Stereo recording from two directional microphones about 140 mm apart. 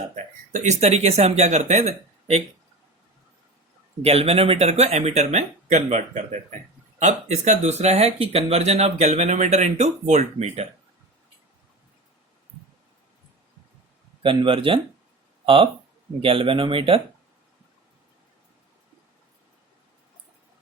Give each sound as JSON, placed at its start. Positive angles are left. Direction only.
{"t": 0.5, "sound": "speech", "side_deg": -55}
{"t": 4.0, "sound": "speech", "side_deg": -45}
{"t": 14.2, "sound": "speech", "side_deg": -40}